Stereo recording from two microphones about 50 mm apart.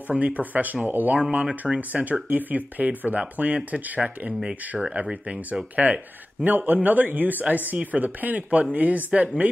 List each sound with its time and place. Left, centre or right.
0.1 s speech: right
5.8 s speech: right
6.4 s speech: right